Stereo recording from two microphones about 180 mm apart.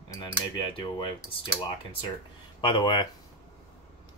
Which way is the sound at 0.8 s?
25° left (ahead or behind).